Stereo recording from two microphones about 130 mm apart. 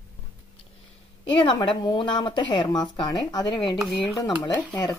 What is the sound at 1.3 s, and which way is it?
Speech, 35° left (ahead or behind).